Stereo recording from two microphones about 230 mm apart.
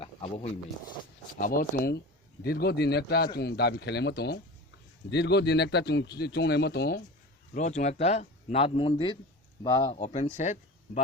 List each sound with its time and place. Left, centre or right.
0.0 s a sound: left
1.4 s speech: left
7.5 s a man's voice: left